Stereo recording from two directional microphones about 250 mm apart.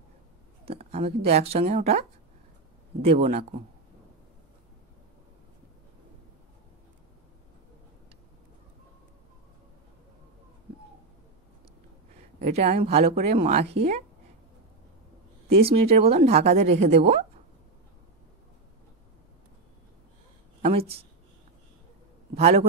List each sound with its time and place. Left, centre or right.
0.7 s speech: right
12.4 s speech: right
15.4 s speech: right
22.3 s speech: right